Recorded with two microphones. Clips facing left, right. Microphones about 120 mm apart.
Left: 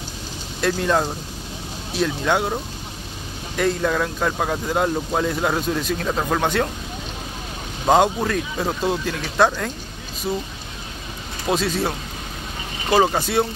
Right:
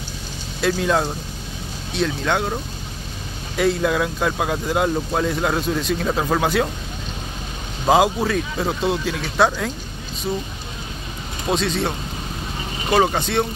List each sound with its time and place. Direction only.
0.6 s speech: centre (ahead or behind)
3.5 s speech: 5° right (ahead or behind)
7.8 s speech: 5° right (ahead or behind)
11.4 s speech: 5° left (ahead or behind)
12.9 s speech: 5° left (ahead or behind)